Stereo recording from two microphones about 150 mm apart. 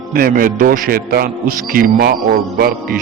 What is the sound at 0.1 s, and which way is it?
A man's voice, 75° right (ahead or behind).